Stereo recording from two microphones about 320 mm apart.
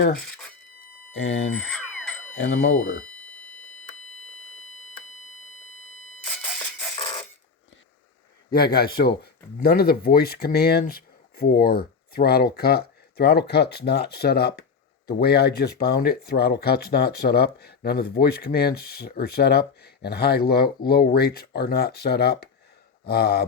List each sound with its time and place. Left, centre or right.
1.1 s chopping: left
1.5 s alarm: centre
2.4 s chopping: left
6.6 s music: centre
8.5 s speech: left
13.5 s chopping: left
15.0 s speech: left